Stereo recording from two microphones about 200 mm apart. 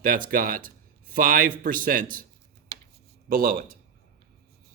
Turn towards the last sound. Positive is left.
turn(degrees=-45)  # may be behind; listen again after turning